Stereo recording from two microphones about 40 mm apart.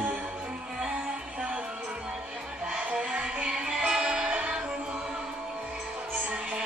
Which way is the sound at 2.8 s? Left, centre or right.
Right.